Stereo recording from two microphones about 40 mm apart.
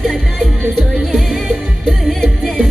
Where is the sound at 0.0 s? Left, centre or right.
Centre.